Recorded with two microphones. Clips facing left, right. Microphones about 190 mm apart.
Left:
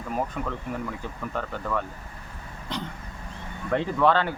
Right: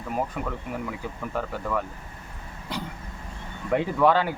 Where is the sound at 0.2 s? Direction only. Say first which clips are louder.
Right 1 dB; 5° right (ahead or behind).